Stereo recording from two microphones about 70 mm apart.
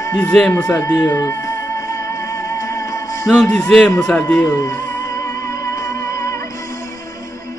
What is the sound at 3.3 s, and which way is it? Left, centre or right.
Speech, centre.